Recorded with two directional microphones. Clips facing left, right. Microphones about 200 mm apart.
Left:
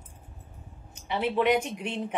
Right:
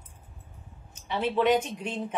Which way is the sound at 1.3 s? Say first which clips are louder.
Right 1 dB; 10° left (ahead or behind).